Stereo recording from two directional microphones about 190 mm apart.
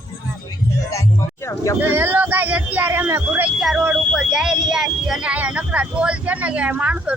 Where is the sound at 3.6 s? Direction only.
Centre (ahead or behind).